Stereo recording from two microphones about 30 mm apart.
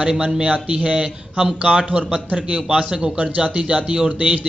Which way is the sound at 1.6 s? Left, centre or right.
Right.